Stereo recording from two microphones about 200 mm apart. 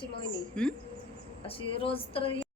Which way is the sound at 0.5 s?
5° left (ahead or behind).